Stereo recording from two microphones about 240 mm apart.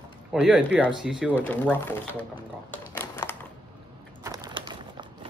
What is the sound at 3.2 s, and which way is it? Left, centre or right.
Typewriter, centre.